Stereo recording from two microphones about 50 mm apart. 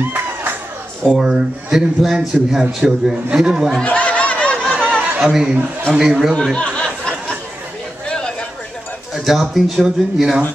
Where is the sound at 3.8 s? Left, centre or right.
Left.